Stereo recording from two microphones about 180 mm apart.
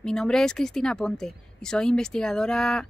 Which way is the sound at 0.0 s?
5° left (ahead or behind).